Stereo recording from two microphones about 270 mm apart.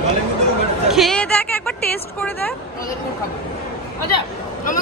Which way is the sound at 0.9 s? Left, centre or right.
Centre.